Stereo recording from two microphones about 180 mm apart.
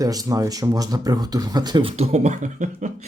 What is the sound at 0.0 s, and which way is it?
Speech, 20° right (ahead or behind).